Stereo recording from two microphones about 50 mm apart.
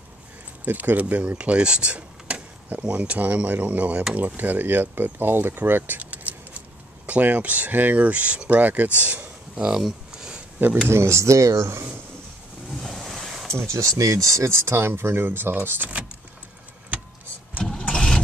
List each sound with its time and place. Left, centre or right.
0.7 s speech: right
5.9 s keys jangling: right
7.1 s speech: right
9.8 s a sound: centre
10.9 s speech: right
12.7 s waves: centre
13.5 s speech: right
17.7 s vehicle: centre